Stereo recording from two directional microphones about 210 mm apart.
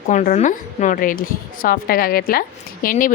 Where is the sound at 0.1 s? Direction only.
35° left (ahead or behind).